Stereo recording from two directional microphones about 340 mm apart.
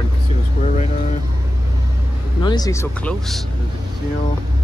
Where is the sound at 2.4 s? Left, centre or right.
Centre.